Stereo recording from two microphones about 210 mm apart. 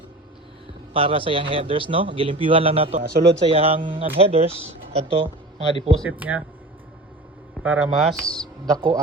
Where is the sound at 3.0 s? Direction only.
45° right (ahead or behind).